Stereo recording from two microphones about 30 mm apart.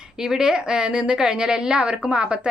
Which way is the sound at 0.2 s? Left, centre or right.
Right.